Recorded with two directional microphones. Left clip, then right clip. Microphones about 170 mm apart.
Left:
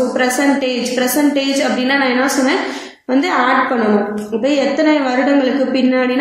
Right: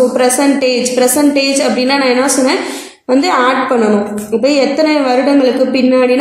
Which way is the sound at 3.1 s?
45° right (ahead or behind).